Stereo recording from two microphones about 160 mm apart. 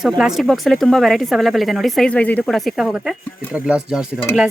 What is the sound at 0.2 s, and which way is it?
Speech, centre (ahead or behind).